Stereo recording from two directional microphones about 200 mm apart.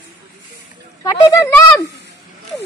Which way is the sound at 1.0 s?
15° left (ahead or behind).